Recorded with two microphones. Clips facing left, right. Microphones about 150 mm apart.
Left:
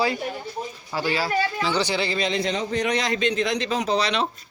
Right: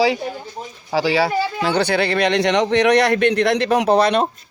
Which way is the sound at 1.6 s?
60° right (ahead or behind).